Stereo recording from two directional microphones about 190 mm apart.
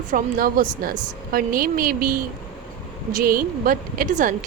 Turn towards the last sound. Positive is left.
turn(degrees=-45)  # may be behind; listen again after turning